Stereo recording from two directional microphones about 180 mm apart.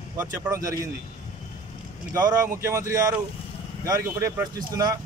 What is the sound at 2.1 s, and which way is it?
A man's voice, 20° right (ahead or behind).